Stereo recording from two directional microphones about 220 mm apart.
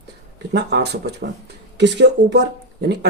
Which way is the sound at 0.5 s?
50° right (ahead or behind).